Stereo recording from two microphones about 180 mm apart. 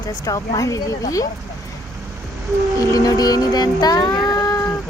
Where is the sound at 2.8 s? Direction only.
20° left (ahead or behind).